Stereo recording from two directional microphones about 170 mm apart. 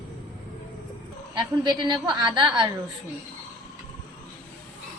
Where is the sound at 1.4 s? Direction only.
25° right (ahead or behind).